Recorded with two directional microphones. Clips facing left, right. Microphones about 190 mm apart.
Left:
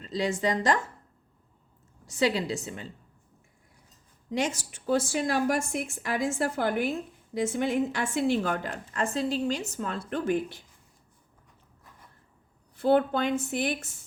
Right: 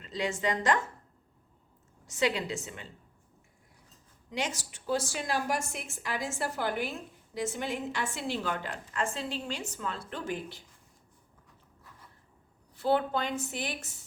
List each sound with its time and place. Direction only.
0.0 s a woman's voice: 35° left (ahead or behind)
2.0 s a woman's voice: 35° left (ahead or behind)
4.3 s a woman's voice: 50° left (ahead or behind)
12.7 s a woman's voice: 50° left (ahead or behind)